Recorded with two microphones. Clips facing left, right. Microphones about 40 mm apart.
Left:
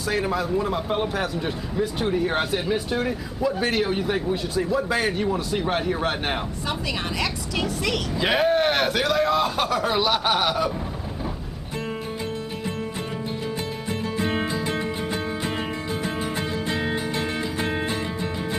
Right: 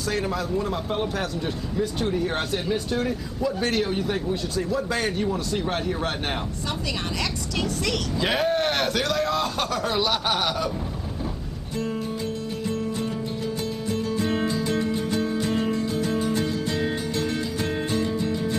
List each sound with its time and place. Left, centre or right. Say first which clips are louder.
0.1 s speech: left 3 dB; centre
7.2 s speech: left 1 dB; centre
14.1 s music: even; left